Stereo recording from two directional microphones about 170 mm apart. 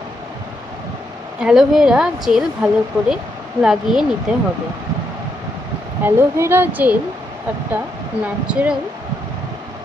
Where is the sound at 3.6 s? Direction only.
20° right (ahead or behind).